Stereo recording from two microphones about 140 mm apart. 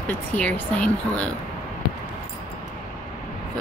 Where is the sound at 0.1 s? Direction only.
10° left (ahead or behind).